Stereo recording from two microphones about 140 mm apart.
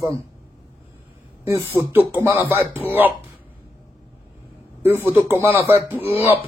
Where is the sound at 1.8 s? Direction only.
15° right (ahead or behind).